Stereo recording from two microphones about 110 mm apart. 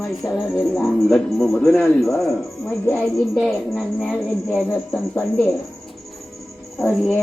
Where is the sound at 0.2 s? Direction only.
35° left (ahead or behind).